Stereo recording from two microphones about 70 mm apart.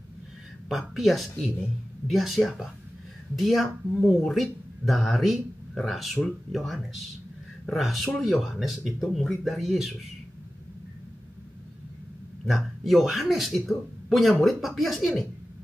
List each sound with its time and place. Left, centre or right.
0.7 s speech: centre
1.3 s speech: centre
2.0 s speech: centre
12.4 s speech: centre